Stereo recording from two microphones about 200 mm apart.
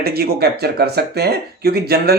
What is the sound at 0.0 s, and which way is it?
Speech, 50° right (ahead or behind).